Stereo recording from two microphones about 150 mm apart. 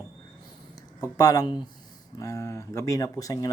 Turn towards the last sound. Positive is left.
turn(degrees=25)  # may be behind; listen again after turning